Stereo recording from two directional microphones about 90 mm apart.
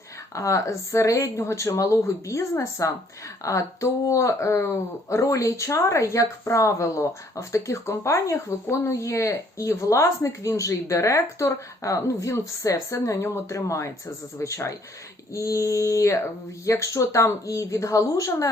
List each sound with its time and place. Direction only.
0.3 s a woman's voice: 35° left (ahead or behind)